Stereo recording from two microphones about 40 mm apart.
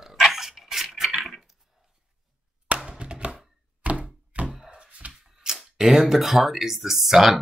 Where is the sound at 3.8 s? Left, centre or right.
Right.